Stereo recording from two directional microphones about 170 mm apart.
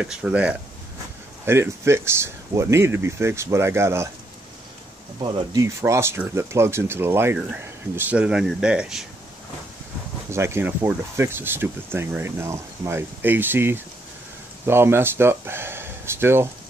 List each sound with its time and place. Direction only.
0.0 s speech: 5° right (ahead or behind)
5.2 s speech: 20° right (ahead or behind)
10.3 s speech: 15° right (ahead or behind)